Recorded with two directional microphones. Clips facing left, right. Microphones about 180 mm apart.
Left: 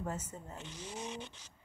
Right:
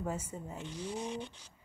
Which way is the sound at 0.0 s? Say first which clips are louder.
Right 3 dB; 10° right (ahead or behind).